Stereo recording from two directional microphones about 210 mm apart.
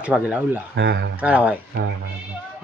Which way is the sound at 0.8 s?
55° right (ahead or behind).